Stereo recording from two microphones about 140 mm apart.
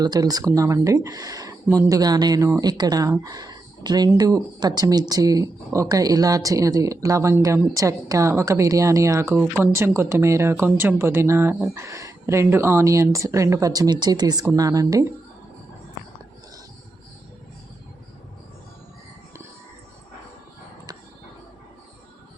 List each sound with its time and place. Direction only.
0.0 s speech: 30° right (ahead or behind)